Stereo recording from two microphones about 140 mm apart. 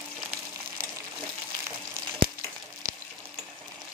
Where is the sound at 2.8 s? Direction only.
90° right.